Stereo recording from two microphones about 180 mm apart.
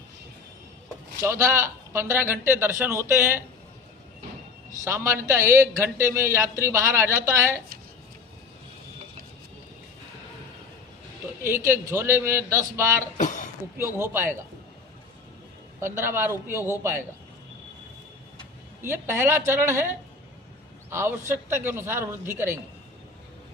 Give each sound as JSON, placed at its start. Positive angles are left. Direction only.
{"t": 1.2, "sound": "a man's voice", "side_deg": -15}
{"t": 4.9, "sound": "a man's voice", "side_deg": -15}
{"t": 11.4, "sound": "a man's voice", "side_deg": -15}
{"t": 13.1, "sound": "a sound", "side_deg": 45}
{"t": 14.0, "sound": "a man's voice", "side_deg": -10}
{"t": 15.8, "sound": "a man's voice", "side_deg": -15}
{"t": 18.8, "sound": "a man's voice", "side_deg": -15}
{"t": 20.9, "sound": "a man's voice", "side_deg": -15}